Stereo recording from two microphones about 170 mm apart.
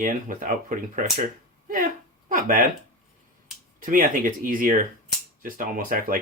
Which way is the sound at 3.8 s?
55° right (ahead or behind).